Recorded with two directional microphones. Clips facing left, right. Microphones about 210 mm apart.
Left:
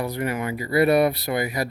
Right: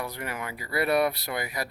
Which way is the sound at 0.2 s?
20° left (ahead or behind).